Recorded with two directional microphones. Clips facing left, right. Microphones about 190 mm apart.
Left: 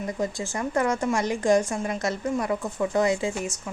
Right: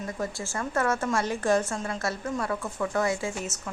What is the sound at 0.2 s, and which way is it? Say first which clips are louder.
A woman's voice: left 3 dB; 15° left (ahead or behind).